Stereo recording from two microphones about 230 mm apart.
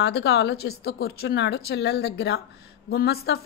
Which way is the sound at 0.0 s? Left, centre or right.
Left.